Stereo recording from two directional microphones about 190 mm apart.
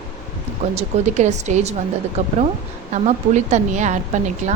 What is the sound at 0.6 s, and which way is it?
A woman's voice, 40° right (ahead or behind).